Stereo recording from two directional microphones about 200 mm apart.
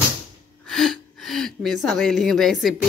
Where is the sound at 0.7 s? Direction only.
Centre (ahead or behind).